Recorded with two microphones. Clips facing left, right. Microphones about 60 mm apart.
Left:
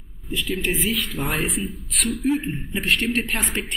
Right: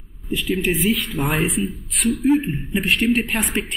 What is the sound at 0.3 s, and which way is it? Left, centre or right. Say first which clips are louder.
Speech: right 4 dB; centre.